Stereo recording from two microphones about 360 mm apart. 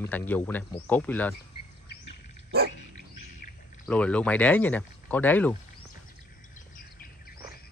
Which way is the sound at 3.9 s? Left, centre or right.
Centre.